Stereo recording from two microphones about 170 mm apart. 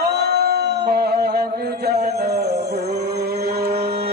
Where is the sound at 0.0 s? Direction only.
75° right (ahead or behind).